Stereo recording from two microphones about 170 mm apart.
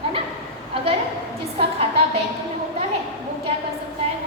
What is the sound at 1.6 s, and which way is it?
Speech, 35° right (ahead or behind).